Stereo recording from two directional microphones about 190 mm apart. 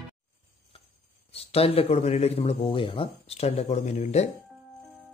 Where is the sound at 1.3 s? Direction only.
30° left (ahead or behind).